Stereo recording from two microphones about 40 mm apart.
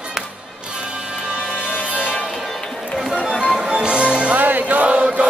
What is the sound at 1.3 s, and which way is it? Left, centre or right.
Music, right.